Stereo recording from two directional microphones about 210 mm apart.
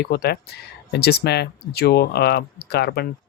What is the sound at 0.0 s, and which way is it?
Speech, 50° left (ahead or behind).